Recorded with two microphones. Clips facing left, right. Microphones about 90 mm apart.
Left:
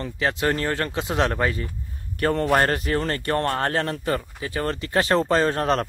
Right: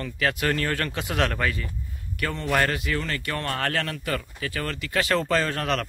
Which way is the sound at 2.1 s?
40° left (ahead or behind).